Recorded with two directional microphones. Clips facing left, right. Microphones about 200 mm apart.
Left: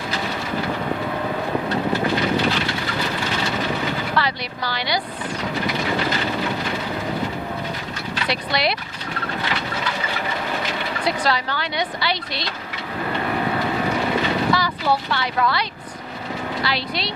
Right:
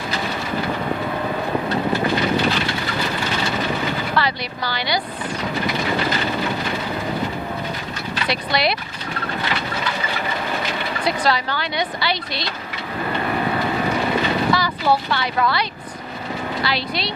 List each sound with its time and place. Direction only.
1.7 s vehicle: 15° right (ahead or behind)
8.1 s speech: 10° right (ahead or behind)
9.4 s engine: 10° right (ahead or behind)
13.0 s vehicle: 15° right (ahead or behind)
16.6 s speech: 10° right (ahead or behind)